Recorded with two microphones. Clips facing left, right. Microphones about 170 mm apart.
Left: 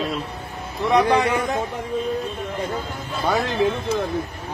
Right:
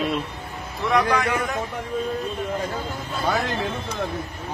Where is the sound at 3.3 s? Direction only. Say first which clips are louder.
Left 2 dB; 15° left (ahead or behind).